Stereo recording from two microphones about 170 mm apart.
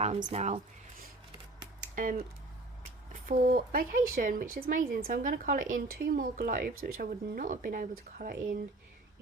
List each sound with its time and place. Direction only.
0.0 s speech: 45° right (ahead or behind)
1.8 s typing: 55° right (ahead or behind)
3.1 s speech: 50° right (ahead or behind)